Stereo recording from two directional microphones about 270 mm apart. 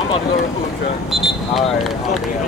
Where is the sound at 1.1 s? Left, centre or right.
Centre.